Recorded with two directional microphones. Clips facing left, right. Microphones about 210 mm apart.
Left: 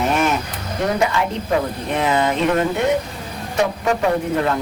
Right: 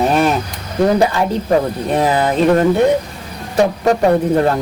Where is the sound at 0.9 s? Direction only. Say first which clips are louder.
Right 5 dB; 35° right (ahead or behind).